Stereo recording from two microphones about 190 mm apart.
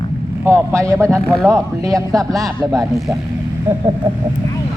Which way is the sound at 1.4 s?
15° right (ahead or behind).